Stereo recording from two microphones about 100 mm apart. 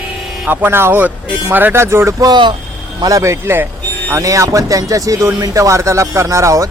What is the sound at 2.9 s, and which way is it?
Speech, 35° right (ahead or behind).